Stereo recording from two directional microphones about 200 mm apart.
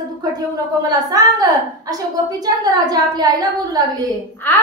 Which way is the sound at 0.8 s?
20° right (ahead or behind).